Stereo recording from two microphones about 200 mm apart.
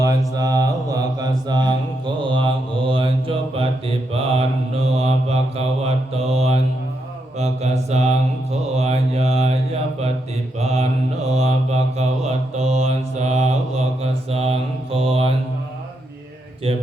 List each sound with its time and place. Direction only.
0.0 s mantra: 15° right (ahead or behind)
10.6 s mantra: 35° right (ahead or behind)